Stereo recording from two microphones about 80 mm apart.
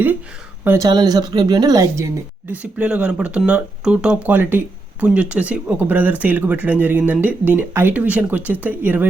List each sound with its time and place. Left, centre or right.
0.9 s speech: right
2.5 s speech: centre